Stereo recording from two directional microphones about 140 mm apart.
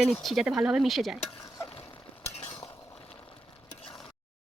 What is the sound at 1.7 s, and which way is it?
Stir, 45° left (ahead or behind).